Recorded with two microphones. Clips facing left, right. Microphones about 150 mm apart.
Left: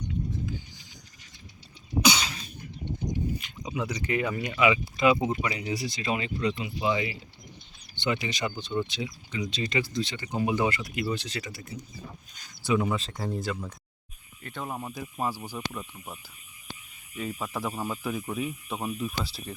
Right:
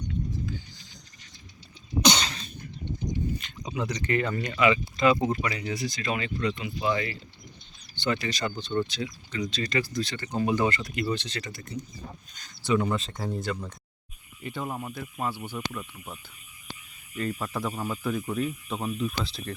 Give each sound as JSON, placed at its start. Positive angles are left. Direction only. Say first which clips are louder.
{"t": 0.1, "sound": "a sound", "louder": "right 1 dB", "side_deg": 15}
{"t": 2.0, "sound": "cough", "louder": "right 1 dB", "side_deg": 5}
{"t": 3.3, "sound": "speech", "louder": "even", "side_deg": 10}
{"t": 5.8, "sound": "speech", "louder": "even", "side_deg": 30}
{"t": 6.7, "sound": "speech", "louder": "even", "side_deg": 15}
{"t": 14.8, "sound": "speech", "louder": "left 1 dB", "side_deg": 15}
{"t": 17.2, "sound": "speech", "louder": "right 2 dB", "side_deg": 5}